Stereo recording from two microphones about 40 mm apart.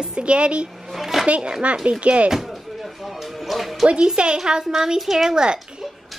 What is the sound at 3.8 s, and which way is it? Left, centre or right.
A woman's voice, right.